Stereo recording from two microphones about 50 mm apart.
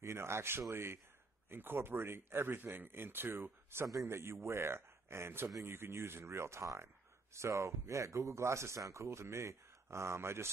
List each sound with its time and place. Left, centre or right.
0.0 s speech: right
1.5 s speech: right
3.7 s a man's voice: right